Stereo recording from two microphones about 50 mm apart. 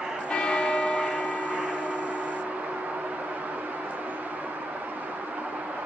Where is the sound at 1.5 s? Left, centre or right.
Right.